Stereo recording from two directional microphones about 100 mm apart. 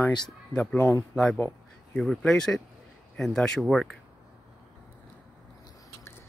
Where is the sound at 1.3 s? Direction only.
20° left (ahead or behind).